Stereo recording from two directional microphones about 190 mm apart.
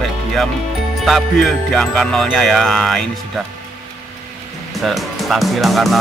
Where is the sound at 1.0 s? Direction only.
Centre (ahead or behind).